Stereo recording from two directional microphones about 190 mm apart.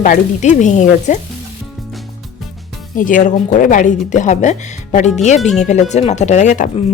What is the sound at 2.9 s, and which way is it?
Speech, 45° left (ahead or behind).